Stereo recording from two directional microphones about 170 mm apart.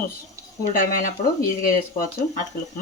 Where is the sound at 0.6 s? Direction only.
55° left (ahead or behind).